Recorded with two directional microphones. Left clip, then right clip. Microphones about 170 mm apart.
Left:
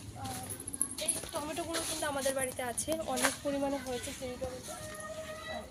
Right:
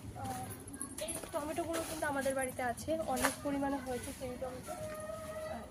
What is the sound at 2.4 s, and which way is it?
Speech, 30° left (ahead or behind).